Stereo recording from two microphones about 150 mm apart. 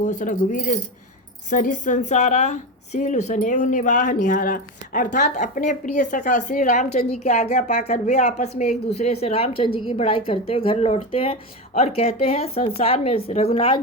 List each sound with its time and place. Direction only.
0.0 s a woman's voice: 55° left (ahead or behind); by 13.7 s 40° left (ahead or behind)